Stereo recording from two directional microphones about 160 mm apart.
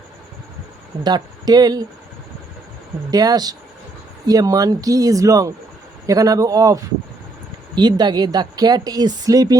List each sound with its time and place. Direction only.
1.0 s speech: 25° right (ahead or behind)
3.1 s speech: 25° right (ahead or behind)